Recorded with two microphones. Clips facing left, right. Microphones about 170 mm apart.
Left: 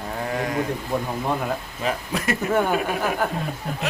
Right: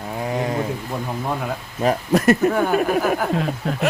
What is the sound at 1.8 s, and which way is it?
Speech, 45° right (ahead or behind).